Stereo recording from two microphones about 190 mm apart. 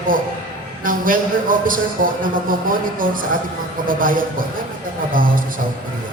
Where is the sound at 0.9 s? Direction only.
45° right (ahead or behind).